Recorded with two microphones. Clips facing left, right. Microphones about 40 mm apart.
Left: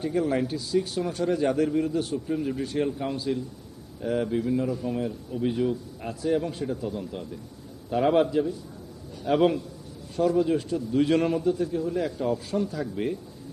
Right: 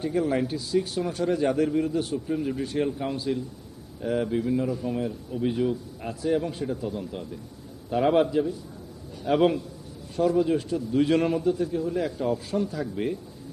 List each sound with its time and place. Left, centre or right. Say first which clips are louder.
0.0 s a man's voice: even; centre